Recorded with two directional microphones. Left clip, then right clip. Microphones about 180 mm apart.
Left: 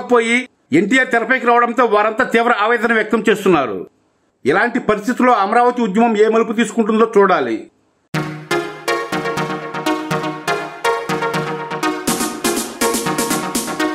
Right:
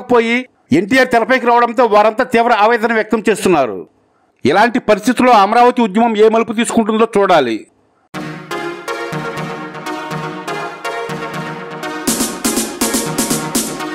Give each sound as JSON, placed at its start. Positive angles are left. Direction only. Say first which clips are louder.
{"t": 0.1, "sound": "a man's voice", "louder": "right 2 dB", "side_deg": -35}
{"t": 4.4, "sound": "speech", "louder": "right 4 dB", "side_deg": -45}
{"t": 8.1, "sound": "music", "louder": "left 4 dB", "side_deg": 0}
{"t": 11.8, "sound": "music", "louder": "right 1 dB", "side_deg": 0}